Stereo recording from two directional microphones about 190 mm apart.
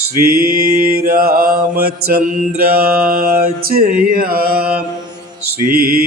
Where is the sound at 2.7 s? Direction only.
55° right (ahead or behind).